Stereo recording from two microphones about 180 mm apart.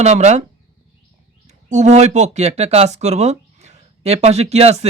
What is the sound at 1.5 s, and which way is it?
A man's voice, 40° right (ahead or behind).